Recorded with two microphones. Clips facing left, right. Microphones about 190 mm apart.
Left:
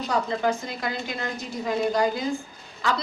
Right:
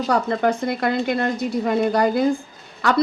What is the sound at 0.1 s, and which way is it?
A woman's voice, 60° right (ahead or behind).